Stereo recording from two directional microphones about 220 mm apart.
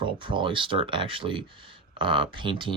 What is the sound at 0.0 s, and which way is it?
Speech, 20° right (ahead or behind).